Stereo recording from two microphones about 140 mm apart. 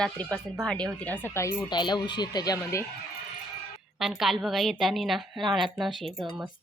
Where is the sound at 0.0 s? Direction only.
10° left (ahead or behind); by 2.8 s 25° left (ahead or behind).